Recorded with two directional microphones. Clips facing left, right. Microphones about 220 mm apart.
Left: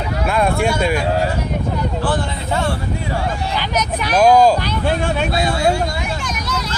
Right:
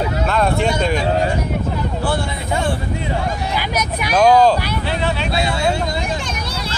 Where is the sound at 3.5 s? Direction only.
10° right (ahead or behind).